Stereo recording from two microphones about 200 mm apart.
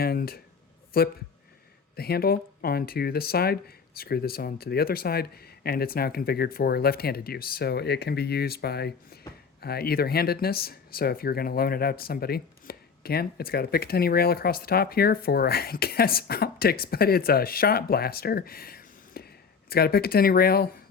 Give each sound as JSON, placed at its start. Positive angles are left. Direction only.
{"t": 0.0, "sound": "speech", "side_deg": 50}